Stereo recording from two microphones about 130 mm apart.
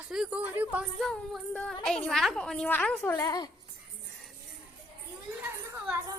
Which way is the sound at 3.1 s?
30° left (ahead or behind).